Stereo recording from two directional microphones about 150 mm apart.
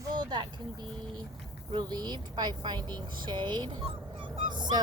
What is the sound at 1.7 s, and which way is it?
Speech, 30° right (ahead or behind).